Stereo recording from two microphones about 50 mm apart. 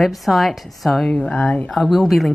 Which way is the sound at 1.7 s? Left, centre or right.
Centre.